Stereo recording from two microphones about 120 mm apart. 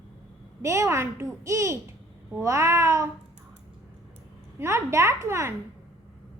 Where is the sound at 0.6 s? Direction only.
25° right (ahead or behind).